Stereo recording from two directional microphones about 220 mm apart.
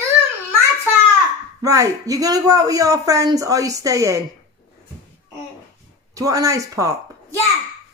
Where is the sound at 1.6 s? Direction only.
15° right (ahead or behind).